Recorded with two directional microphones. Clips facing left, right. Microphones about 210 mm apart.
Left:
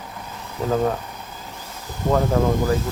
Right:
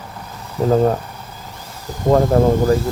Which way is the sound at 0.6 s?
40° right (ahead or behind).